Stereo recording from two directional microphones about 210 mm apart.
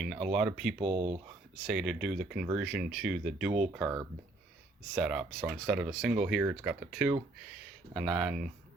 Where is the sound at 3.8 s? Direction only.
15° right (ahead or behind).